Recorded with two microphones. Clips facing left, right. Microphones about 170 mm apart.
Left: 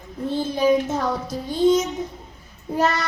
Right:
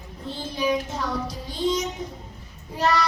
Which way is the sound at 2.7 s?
50° left (ahead or behind).